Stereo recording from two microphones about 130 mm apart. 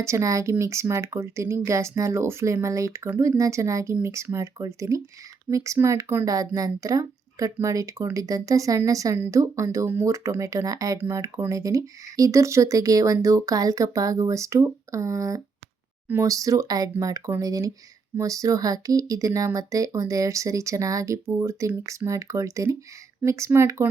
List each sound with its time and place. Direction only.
0.0 s speech: 25° right (ahead or behind)